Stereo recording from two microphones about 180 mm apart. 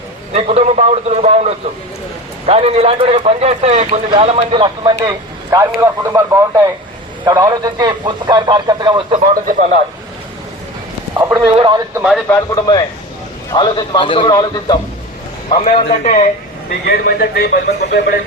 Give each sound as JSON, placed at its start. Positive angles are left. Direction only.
{"t": 0.3, "sound": "a man's voice", "side_deg": -35}
{"t": 5.5, "sound": "a man's voice", "side_deg": -15}
{"t": 11.1, "sound": "a man's voice", "side_deg": -15}
{"t": 12.3, "sound": "a man's voice", "side_deg": 20}
{"t": 15.6, "sound": "a man's voice", "side_deg": 40}
{"t": 16.6, "sound": "speech", "side_deg": 60}